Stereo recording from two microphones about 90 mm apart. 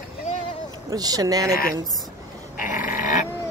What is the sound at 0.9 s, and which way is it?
Speech, 45° right (ahead or behind).